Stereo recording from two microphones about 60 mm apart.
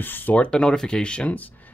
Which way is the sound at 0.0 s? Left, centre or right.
Left.